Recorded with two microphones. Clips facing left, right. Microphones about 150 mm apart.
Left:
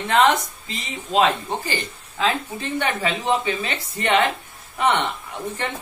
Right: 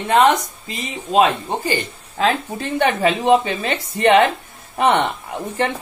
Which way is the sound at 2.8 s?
40° right (ahead or behind).